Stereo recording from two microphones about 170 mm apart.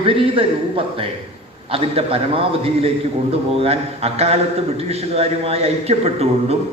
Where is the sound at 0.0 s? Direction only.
30° right (ahead or behind).